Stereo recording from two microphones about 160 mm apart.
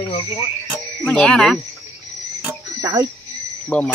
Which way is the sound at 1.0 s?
5° left (ahead or behind).